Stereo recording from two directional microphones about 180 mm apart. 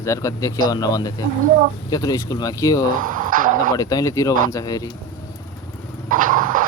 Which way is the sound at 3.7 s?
20° left (ahead or behind).